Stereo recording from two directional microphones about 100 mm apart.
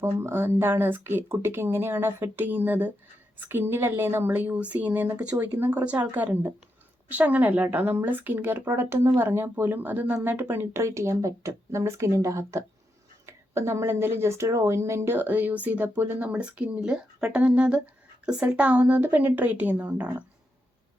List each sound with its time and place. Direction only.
0.0 s a woman's voice: 25° right (ahead or behind)